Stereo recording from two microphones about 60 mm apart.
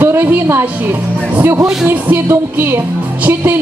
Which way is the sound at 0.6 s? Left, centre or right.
Right.